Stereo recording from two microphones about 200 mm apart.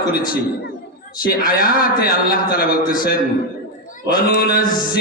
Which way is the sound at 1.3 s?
45° left (ahead or behind).